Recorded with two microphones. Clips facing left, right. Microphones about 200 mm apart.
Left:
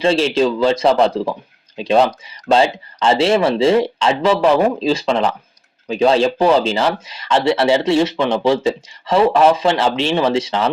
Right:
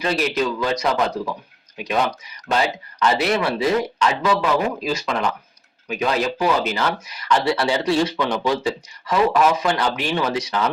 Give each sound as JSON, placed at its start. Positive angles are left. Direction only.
{"t": 0.0, "sound": "speech", "side_deg": 25}